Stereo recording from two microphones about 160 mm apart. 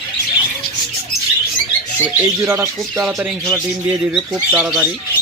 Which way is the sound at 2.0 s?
15° right (ahead or behind).